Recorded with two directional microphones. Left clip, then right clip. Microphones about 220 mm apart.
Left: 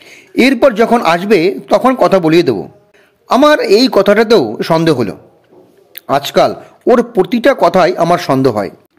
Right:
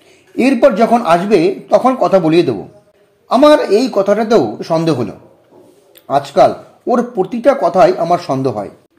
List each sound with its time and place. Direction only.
0.0 s speech: 25° left (ahead or behind)